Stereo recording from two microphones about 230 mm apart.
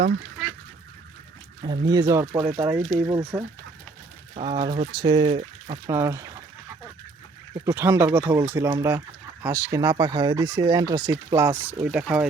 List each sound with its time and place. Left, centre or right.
1.6 s speech: centre
2.6 s speech: centre
5.4 s a sound: right
5.9 s speech: centre
7.6 s speech: centre